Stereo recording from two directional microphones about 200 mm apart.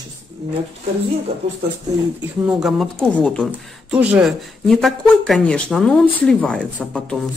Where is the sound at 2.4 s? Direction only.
Centre (ahead or behind).